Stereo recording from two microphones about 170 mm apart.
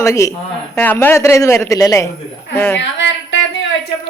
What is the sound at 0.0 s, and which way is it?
Speech, 20° left (ahead or behind).